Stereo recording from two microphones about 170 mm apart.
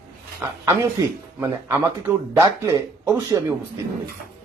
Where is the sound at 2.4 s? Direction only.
15° right (ahead or behind).